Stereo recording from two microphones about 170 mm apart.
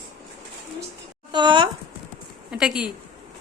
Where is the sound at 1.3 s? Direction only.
25° right (ahead or behind).